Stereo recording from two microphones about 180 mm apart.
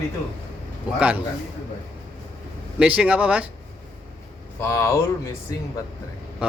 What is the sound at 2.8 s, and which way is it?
Speech, 5° right (ahead or behind).